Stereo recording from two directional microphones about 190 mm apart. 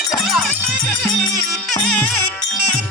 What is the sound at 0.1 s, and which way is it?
Music, centre (ahead or behind).